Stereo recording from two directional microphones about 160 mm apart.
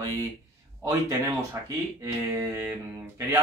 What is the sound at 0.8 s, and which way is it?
Speech, 15° right (ahead or behind).